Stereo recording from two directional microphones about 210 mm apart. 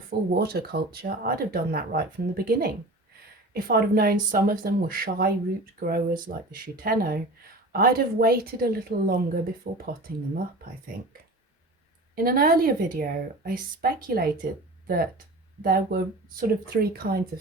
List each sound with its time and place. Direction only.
0.1 s speech: 45° right (ahead or behind)
12.1 s speech: 45° right (ahead or behind)